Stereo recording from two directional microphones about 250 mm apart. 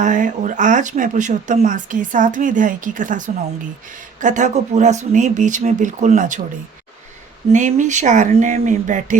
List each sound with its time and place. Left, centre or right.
0.0 s speech: right
7.5 s speech: right